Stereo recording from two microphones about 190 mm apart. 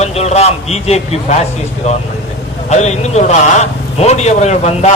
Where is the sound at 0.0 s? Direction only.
35° left (ahead or behind).